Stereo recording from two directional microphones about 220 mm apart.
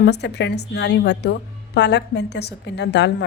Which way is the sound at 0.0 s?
50° left (ahead or behind).